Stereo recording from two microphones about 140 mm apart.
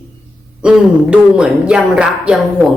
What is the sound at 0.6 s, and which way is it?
Speech, 5° right (ahead or behind).